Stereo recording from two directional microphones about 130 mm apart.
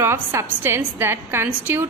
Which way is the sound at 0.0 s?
20° right (ahead or behind).